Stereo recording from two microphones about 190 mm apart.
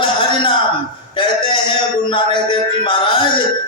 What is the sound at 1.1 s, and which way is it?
Speech, 25° left (ahead or behind).